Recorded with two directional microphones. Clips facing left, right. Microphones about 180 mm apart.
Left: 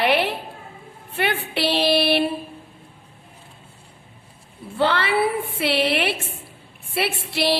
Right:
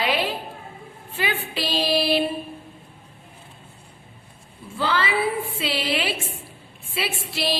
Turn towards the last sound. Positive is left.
turn(degrees=70)  # may be behind; listen again after turning